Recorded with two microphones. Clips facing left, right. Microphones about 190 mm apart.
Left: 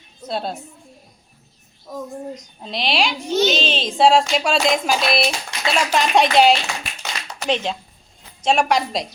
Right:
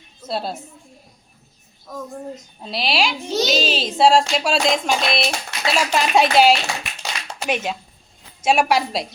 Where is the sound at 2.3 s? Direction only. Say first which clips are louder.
Even; 5° right (ahead or behind).